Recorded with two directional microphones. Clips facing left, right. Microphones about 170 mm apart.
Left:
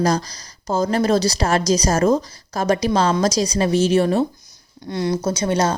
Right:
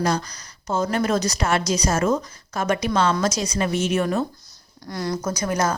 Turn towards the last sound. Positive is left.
turn(degrees=30)  # may be behind; listen again after turning